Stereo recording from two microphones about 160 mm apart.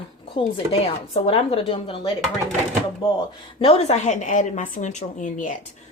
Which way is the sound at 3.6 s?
40° left (ahead or behind).